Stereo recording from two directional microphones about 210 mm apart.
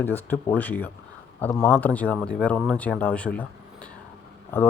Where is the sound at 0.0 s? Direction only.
10° left (ahead or behind).